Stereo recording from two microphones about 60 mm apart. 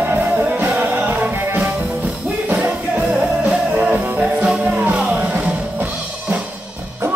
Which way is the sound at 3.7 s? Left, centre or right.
Right.